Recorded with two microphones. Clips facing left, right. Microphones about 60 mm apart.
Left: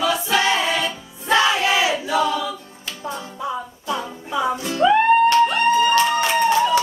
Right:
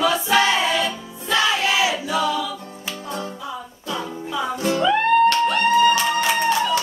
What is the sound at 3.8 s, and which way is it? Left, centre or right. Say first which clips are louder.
Music: right 1 dB; centre.